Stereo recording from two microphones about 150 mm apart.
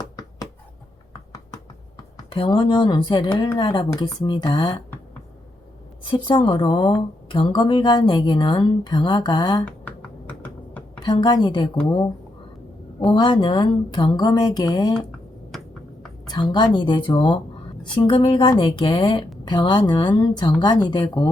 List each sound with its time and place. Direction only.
2.3 s a woman's voice: 35° left (ahead or behind)
6.1 s speech: 30° left (ahead or behind)
9.6 s computer keyboard: 10° left (ahead or behind)
11.0 s speech: 30° left (ahead or behind)
13.0 s speech: 30° left (ahead or behind)
15.5 s a sound: centre (ahead or behind)
16.2 s a woman's voice: 30° left (ahead or behind)